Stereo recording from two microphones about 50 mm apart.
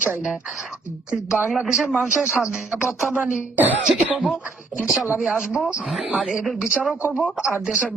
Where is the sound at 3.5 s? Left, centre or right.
Right.